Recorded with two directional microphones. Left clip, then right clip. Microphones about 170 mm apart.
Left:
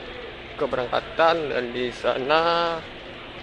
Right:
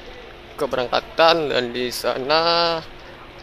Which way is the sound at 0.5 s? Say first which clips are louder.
Right 3 dB; 25° right (ahead or behind).